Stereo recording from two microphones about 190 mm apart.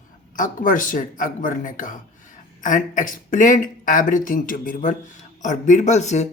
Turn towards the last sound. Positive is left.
turn(degrees=35)  # may be behind; listen again after turning